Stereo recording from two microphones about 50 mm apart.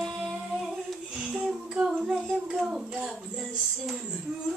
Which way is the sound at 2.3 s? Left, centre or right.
Centre.